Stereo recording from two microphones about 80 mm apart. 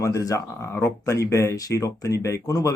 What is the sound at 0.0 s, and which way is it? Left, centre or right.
Speech, left.